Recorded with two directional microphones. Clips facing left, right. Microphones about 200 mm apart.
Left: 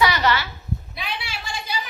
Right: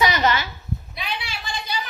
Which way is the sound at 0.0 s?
20° right (ahead or behind).